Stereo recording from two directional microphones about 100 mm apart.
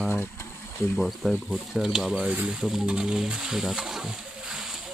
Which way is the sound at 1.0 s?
Centre (ahead or behind).